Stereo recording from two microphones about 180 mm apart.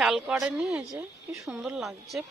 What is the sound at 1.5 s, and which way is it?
Speech, 5° right (ahead or behind).